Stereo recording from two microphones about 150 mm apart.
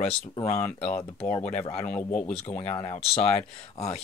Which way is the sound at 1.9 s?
10° left (ahead or behind).